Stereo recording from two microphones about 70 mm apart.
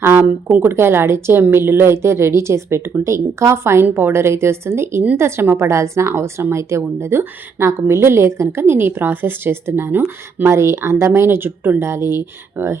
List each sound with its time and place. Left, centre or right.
0.0 s a woman's voice: right